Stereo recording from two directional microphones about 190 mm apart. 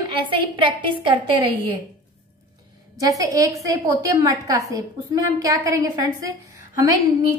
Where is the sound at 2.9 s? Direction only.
20° right (ahead or behind).